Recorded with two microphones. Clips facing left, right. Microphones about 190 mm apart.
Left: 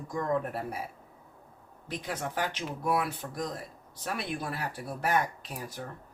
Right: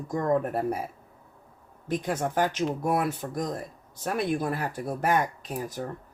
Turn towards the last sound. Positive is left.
turn(degrees=-45)  # may be behind; listen again after turning